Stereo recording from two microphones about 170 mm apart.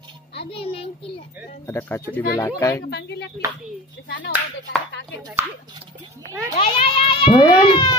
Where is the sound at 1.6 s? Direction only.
15° left (ahead or behind).